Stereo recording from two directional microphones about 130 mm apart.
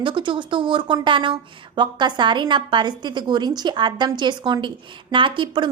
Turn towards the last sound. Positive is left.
turn(degrees=-40)  # may be behind; listen again after turning